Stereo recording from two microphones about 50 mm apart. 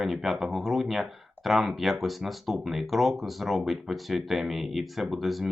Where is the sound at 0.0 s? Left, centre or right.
Centre.